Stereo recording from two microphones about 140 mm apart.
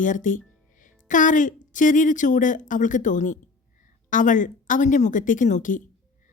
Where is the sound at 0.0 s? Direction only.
70° left (ahead or behind).